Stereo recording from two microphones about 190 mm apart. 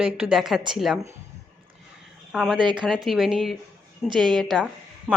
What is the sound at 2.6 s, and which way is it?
Speech, 25° right (ahead or behind).